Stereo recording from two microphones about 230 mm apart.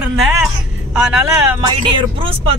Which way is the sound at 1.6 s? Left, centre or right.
Centre.